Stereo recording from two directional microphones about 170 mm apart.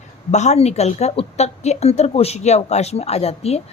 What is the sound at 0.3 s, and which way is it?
Speech, 40° left (ahead or behind).